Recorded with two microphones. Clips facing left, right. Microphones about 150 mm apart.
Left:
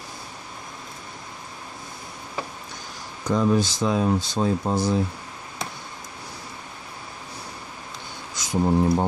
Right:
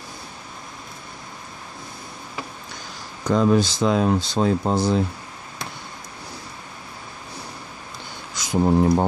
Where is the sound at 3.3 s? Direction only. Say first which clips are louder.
Right 3 dB; 75° right (ahead or behind).